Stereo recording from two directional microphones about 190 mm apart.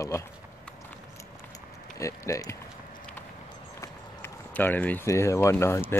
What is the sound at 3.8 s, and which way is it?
Speech, 10° left (ahead or behind).